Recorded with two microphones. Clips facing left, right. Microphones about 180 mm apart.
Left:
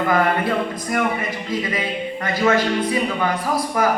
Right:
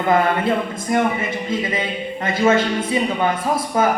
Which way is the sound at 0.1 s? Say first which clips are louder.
Right 4 dB; 25° right (ahead or behind).